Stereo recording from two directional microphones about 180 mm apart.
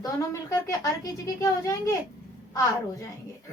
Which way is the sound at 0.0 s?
20° left (ahead or behind).